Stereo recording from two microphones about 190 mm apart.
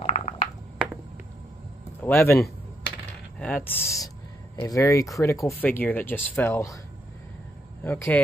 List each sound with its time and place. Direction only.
0.0 s a sound: 30° left (ahead or behind)
2.0 s speech: 10° left (ahead or behind)
7.8 s speech: 10° left (ahead or behind)